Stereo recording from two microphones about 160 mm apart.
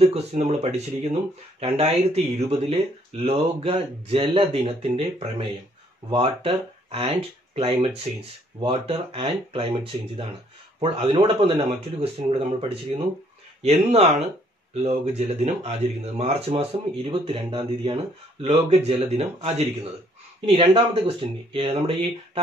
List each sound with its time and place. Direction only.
0.0 s speech: 40° right (ahead or behind)